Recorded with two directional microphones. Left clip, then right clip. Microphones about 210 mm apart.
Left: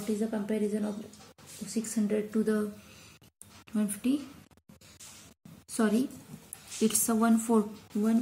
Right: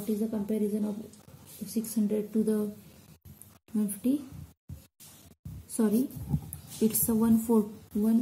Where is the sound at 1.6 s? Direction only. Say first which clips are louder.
Right 1 dB; centre (ahead or behind).